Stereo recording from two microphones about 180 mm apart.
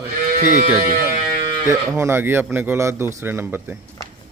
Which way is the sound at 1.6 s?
15° right (ahead or behind).